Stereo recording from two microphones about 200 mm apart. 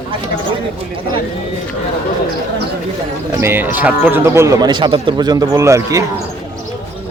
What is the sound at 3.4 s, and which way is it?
Speech, 10° right (ahead or behind).